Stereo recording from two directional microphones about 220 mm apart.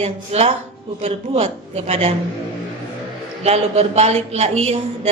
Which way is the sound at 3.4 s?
30° right (ahead or behind).